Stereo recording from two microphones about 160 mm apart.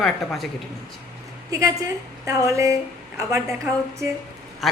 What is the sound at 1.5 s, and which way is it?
A woman's voice, 20° right (ahead or behind).